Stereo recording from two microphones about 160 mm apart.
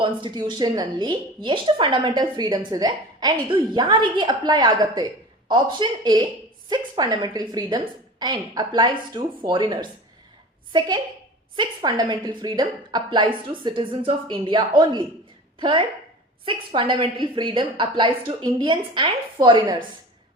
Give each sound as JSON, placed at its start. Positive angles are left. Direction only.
{"t": 0.0, "sound": "a woman's voice", "side_deg": -30}